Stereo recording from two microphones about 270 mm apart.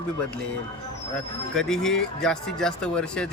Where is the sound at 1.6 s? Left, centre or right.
Centre.